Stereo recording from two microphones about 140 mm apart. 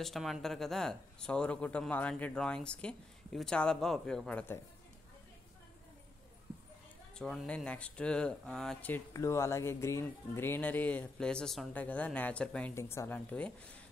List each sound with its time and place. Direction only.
0.0 s speech: centre (ahead or behind)
7.2 s speech: 5° left (ahead or behind)
8.9 s speech: 20° left (ahead or behind)